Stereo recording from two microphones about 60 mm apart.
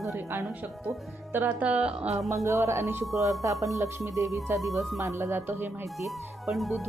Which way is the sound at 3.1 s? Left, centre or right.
Right.